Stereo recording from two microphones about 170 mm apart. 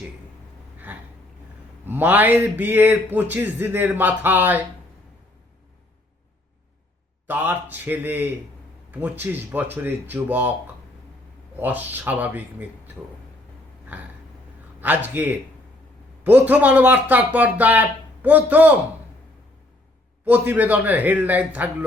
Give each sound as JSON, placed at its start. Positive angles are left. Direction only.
{"t": 1.9, "sound": "speech", "side_deg": -10}
{"t": 7.3, "sound": "speech", "side_deg": -10}
{"t": 11.6, "sound": "speech", "side_deg": -10}
{"t": 14.8, "sound": "speech", "side_deg": -10}
{"t": 20.2, "sound": "speech", "side_deg": -10}